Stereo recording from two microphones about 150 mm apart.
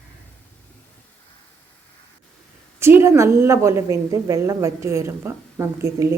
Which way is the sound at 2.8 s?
15° right (ahead or behind).